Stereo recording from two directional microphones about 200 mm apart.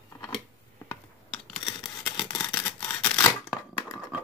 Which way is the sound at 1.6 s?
20° left (ahead or behind).